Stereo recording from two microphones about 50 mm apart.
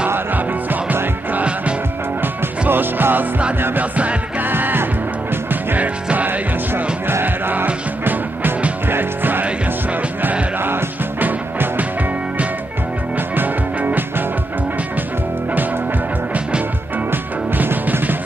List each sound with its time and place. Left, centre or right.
2.7 s music: right
4.5 s music: right
10.6 s music: right
13.7 s music: right
17.1 s music: right